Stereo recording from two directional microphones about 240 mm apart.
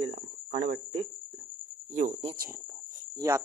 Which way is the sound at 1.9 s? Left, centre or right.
Right.